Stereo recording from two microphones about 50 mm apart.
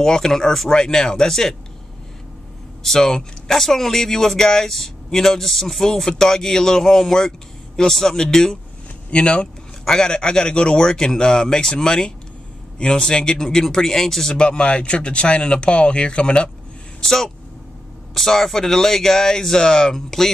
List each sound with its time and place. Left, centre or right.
0.0 s speech: centre
2.8 s speech: centre
17.0 s speech: centre